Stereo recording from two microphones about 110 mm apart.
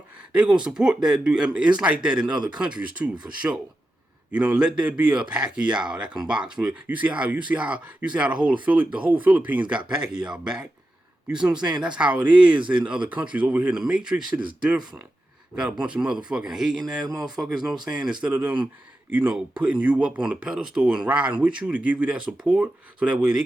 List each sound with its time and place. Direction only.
0.2 s a sound: 10° right (ahead or behind)
0.6 s speech: 5° right (ahead or behind)
15.8 s speech: 10° right (ahead or behind)